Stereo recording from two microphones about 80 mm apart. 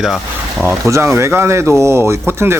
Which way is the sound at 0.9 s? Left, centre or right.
Right.